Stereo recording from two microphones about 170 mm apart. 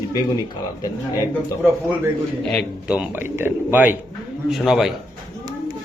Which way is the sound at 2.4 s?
5° left (ahead or behind).